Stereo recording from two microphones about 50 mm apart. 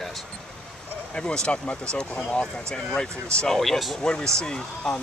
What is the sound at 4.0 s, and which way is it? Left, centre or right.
Speech, centre.